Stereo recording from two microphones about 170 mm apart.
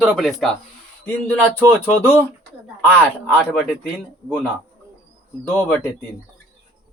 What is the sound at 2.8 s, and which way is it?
A man's voice, 10° left (ahead or behind).